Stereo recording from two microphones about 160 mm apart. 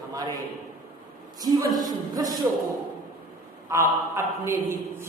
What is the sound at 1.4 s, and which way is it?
A man's voice, 25° right (ahead or behind).